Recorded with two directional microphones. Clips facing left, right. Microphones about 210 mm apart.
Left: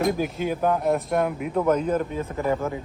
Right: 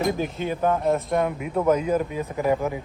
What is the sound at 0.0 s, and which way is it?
Speech, centre (ahead or behind).